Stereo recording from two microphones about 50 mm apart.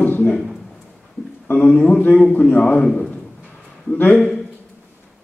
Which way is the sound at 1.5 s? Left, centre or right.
Left.